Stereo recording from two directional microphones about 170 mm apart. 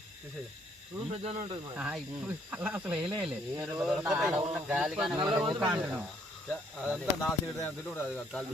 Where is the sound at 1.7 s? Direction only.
5° right (ahead or behind).